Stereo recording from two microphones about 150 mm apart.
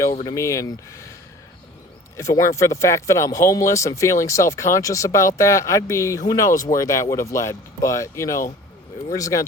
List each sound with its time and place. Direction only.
0.3 s speech: 20° left (ahead or behind)
2.1 s speech: 20° left (ahead or behind)